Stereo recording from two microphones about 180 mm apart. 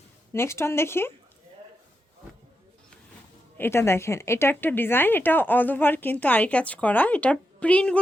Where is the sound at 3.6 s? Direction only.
15° left (ahead or behind).